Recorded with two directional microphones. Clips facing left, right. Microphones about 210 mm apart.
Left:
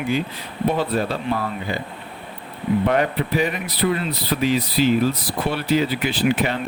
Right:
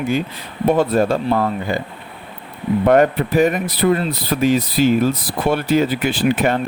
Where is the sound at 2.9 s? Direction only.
45° right (ahead or behind).